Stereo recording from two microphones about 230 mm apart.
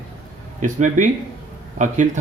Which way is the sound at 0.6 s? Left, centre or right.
Right.